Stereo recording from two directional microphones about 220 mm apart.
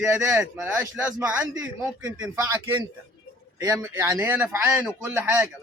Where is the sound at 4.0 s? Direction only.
15° right (ahead or behind).